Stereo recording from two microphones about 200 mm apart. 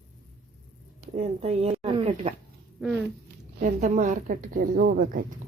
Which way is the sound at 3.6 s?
40° right (ahead or behind).